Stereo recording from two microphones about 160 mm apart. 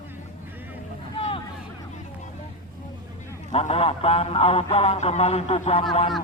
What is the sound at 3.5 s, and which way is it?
Speech, 40° left (ahead or behind).